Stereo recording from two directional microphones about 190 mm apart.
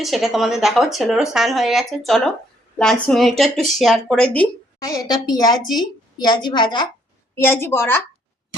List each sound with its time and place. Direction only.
0.0 s speech: centre (ahead or behind)
4.8 s a woman's voice: 20° left (ahead or behind)
7.4 s a woman's voice: 15° left (ahead or behind)